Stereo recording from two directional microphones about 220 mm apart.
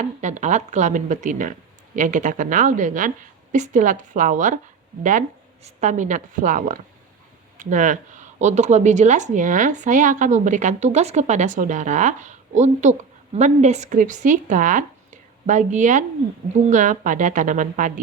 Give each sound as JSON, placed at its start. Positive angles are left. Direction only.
{"t": 0.0, "sound": "a woman's voice", "side_deg": -35}
{"t": 5.6, "sound": "a woman's voice", "side_deg": -30}